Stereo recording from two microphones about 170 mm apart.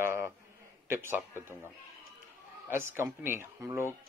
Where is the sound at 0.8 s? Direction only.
15° right (ahead or behind).